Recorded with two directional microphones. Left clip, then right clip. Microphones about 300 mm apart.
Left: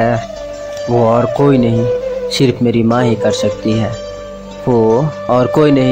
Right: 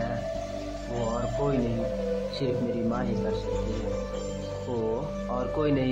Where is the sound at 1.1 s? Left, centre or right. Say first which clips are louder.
Left 15 dB; left.